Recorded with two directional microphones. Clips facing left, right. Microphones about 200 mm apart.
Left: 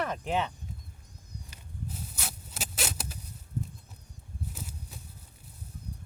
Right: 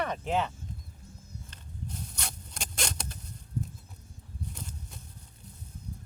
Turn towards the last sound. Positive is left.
turn(degrees=5)  # may be behind; listen again after turning